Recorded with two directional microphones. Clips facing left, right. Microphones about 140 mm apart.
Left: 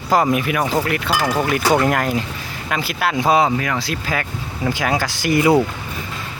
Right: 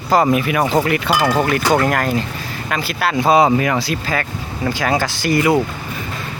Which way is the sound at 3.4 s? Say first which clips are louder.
Right 5 dB; 25° right (ahead or behind).